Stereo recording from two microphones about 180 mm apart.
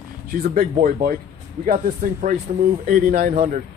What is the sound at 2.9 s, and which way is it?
Speech, 50° right (ahead or behind).